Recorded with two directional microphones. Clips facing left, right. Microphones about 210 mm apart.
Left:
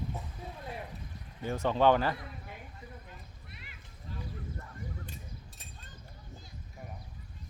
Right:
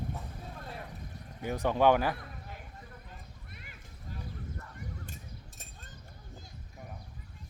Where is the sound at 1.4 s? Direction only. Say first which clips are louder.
Even; 15° right (ahead or behind).